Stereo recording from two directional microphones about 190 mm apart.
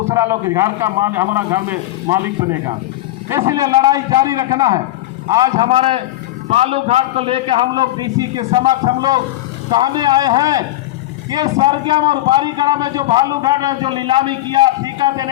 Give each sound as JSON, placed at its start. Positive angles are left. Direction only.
{"t": 0.0, "sound": "a man's voice", "side_deg": -15}
{"t": 5.6, "sound": "a man's voice", "side_deg": -30}
{"t": 11.4, "sound": "a man's voice", "side_deg": -30}